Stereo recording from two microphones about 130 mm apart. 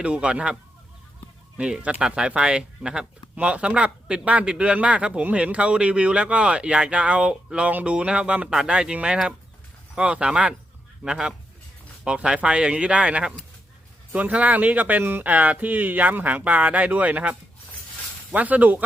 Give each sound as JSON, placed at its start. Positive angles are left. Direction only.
{"t": 0.0, "sound": "speech", "side_deg": -10}
{"t": 1.5, "sound": "speech", "side_deg": -10}